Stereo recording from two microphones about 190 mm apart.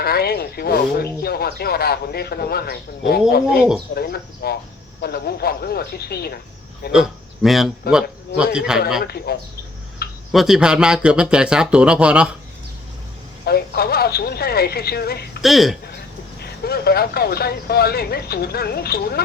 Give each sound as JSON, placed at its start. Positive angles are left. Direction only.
{"t": 0.0, "sound": "speech", "side_deg": 55}
{"t": 6.9, "sound": "speech", "side_deg": 0}
{"t": 9.0, "sound": "speech", "side_deg": 55}
{"t": 10.0, "sound": "tick-tock", "side_deg": 55}
{"t": 10.3, "sound": "speech", "side_deg": 0}
{"t": 13.4, "sound": "speech", "side_deg": 55}
{"t": 15.4, "sound": "speech", "side_deg": 0}
{"t": 16.4, "sound": "speech", "side_deg": 55}